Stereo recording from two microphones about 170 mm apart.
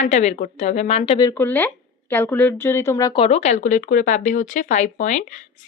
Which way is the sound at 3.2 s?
40° left (ahead or behind).